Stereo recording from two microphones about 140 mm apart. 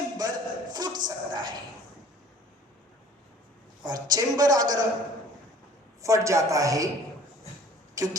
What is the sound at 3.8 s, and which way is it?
A woman's voice, 30° right (ahead or behind).